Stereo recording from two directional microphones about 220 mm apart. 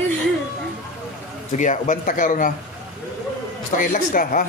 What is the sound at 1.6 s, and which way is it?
Speech, 35° left (ahead or behind).